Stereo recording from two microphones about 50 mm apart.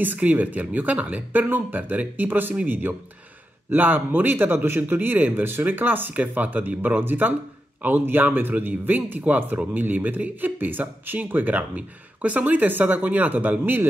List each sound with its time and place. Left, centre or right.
0.0 s speech: right